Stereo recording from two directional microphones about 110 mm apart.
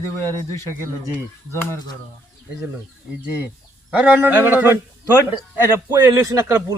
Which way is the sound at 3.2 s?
20° right (ahead or behind).